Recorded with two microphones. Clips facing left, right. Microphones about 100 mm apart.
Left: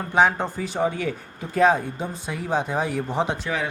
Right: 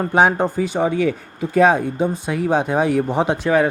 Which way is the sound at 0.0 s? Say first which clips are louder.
Right 4 dB; 50° right (ahead or behind).